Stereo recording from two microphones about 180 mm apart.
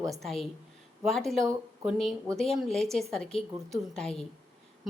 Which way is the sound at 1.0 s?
Centre (ahead or behind).